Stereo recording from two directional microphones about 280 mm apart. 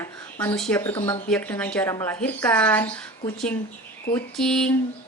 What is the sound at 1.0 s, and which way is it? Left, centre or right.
Speech, centre.